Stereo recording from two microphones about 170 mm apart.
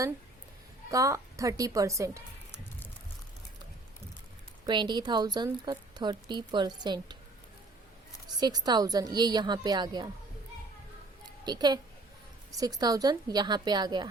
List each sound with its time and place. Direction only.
0.9 s a woman's voice: 20° right (ahead or behind)
4.6 s a woman's voice: 25° right (ahead or behind)
8.4 s a woman's voice: 25° right (ahead or behind)
11.4 s a woman's voice: 25° right (ahead or behind)